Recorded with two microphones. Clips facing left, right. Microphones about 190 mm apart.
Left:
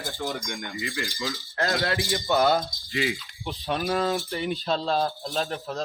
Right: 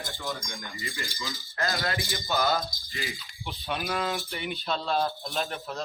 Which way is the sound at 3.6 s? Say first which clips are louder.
Left 5 dB; 35° left (ahead or behind).